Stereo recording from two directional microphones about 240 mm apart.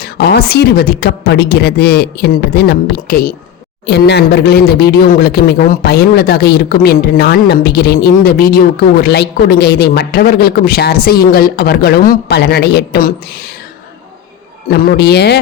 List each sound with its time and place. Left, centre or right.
0.0 s speech: left
14.7 s a man's voice: left